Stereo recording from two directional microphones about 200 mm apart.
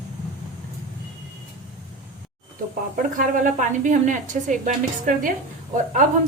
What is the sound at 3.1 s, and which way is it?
A woman's voice, 40° right (ahead or behind).